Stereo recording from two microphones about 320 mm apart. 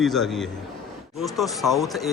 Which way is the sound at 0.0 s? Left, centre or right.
Centre.